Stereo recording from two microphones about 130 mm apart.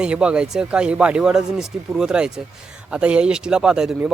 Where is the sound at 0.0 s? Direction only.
10° right (ahead or behind).